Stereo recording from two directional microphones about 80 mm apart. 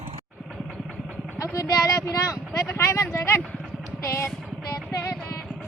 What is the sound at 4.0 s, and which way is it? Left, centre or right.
Music, left.